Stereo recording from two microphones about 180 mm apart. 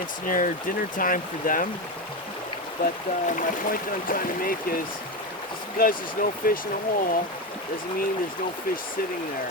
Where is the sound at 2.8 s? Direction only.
50° left (ahead or behind).